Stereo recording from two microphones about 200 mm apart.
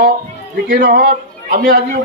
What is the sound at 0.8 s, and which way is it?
A man's voice, 50° right (ahead or behind).